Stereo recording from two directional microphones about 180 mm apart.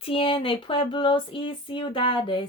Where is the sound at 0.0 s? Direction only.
30° left (ahead or behind).